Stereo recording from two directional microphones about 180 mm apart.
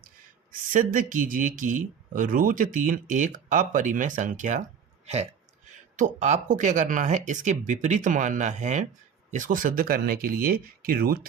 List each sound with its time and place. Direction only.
0.7 s speech: 50° right (ahead or behind)